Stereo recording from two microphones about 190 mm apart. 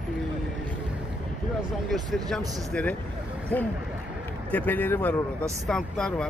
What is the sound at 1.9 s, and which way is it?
Speech, centre (ahead or behind).